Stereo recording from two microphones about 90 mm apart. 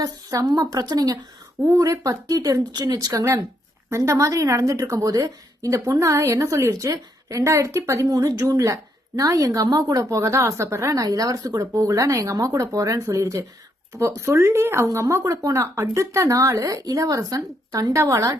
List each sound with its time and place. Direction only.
0.0 s a woman's voice: 40° right (ahead or behind)